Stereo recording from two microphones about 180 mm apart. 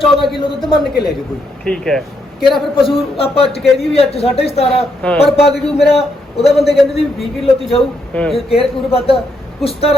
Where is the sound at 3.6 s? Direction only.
Centre (ahead or behind).